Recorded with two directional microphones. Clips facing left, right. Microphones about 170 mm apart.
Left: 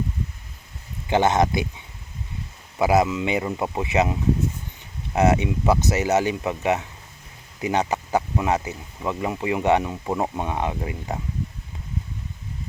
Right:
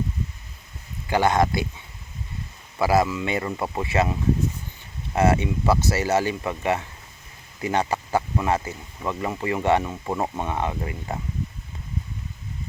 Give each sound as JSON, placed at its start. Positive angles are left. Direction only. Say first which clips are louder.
{"t": 1.0, "sound": "speech", "louder": "left 1 dB", "side_deg": 20}
{"t": 2.7, "sound": "speech", "louder": "left 1 dB", "side_deg": 20}